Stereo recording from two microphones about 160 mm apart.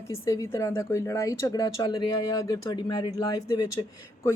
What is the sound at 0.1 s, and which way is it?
Speech, 20° left (ahead or behind).